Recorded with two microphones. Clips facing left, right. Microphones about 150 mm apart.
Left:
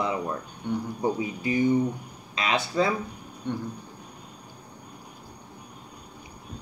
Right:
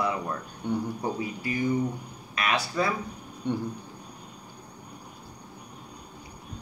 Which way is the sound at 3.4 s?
15° right (ahead or behind).